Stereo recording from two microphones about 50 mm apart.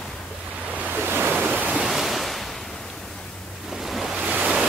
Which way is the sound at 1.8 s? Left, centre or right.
Centre.